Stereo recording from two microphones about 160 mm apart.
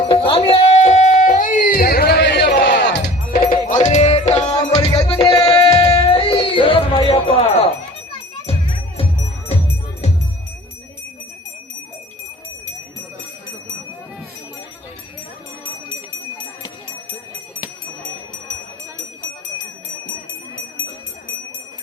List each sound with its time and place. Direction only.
0.1 s music: 35° left (ahead or behind); by 3.1 s 90° left
3.4 s music: 40° left (ahead or behind)
4.8 s music: 20° left (ahead or behind)
6.1 s music: 35° left (ahead or behind)